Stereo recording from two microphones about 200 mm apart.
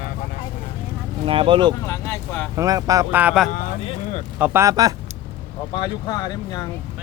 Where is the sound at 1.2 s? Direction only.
25° right (ahead or behind).